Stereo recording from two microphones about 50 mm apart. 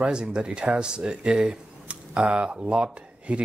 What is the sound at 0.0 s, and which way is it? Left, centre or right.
Speech, centre.